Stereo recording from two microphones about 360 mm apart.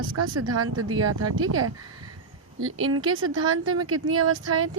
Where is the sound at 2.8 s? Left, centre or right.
Right.